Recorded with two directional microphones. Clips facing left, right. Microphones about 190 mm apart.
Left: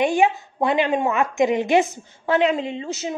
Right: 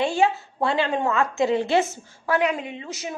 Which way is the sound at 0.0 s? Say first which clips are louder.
Left 3 dB; 15° left (ahead or behind).